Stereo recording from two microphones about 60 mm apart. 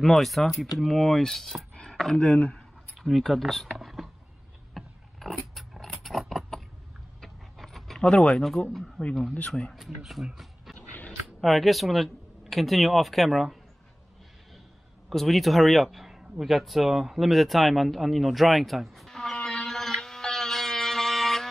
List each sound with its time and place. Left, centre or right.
0.0 s speech: centre
1.9 s a sound: centre
2.1 s speech: left
3.0 s speech: centre
3.6 s vehicle: centre
4.7 s a sound: centre
7.2 s vehicle: centre
8.1 s speech: centre
8.6 s speech: centre
9.8 s speech: centre
15.0 s a sound: centre